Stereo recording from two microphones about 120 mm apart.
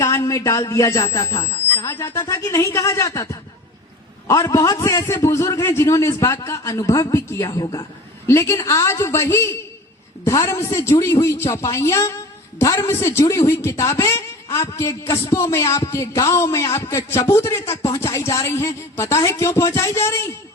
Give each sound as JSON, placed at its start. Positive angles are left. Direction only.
{"t": 0.0, "sound": "a man's voice", "side_deg": 25}